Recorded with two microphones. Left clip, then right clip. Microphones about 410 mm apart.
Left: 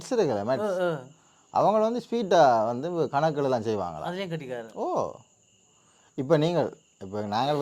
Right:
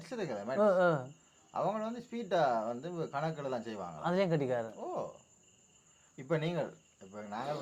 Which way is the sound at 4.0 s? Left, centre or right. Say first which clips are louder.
Right 1 dB; right.